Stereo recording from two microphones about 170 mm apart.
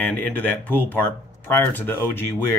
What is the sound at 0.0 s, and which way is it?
Speech, 10° left (ahead or behind).